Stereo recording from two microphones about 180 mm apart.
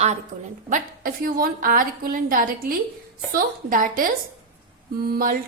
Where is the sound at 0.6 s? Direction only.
50° right (ahead or behind).